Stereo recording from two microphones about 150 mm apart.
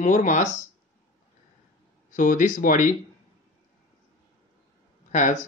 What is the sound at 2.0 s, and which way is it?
Speech, 60° left (ahead or behind).